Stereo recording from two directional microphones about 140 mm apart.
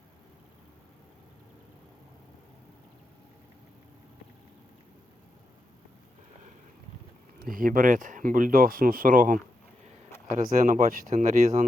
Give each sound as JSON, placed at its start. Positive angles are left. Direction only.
{"t": 7.3, "sound": "speech", "side_deg": -85}